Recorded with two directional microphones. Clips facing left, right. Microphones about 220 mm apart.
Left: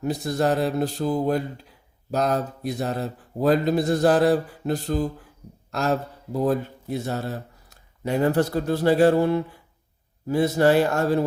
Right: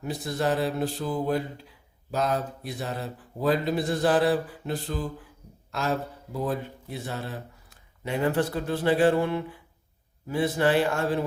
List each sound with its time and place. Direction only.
0.0 s speech: 40° left (ahead or behind)